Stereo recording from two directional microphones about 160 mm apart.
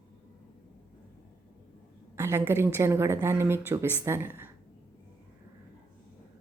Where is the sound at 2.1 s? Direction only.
15° right (ahead or behind).